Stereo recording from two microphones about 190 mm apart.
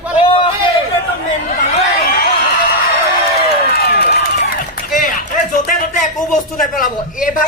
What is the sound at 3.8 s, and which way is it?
Run, 55° left (ahead or behind).